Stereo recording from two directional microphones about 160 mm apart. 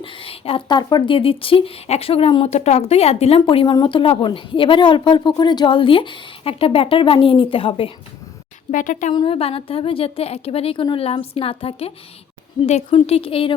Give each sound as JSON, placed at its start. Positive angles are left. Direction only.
{"t": 0.0, "sound": "speech", "side_deg": 35}
{"t": 8.7, "sound": "speech", "side_deg": 55}
{"t": 9.1, "sound": "speech", "side_deg": 35}